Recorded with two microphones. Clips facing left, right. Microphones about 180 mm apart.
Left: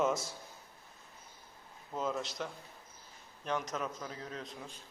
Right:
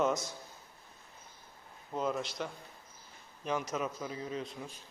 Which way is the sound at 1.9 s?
5° right (ahead or behind).